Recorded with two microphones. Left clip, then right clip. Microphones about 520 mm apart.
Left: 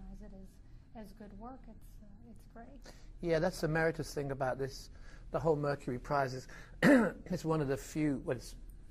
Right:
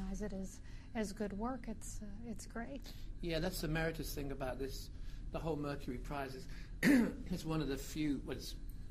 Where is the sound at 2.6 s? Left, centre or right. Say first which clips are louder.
Right 7 dB; right.